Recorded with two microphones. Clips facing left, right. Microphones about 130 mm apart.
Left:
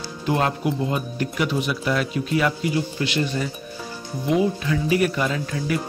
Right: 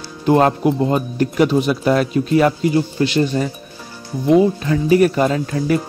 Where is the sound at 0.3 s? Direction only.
40° right (ahead or behind).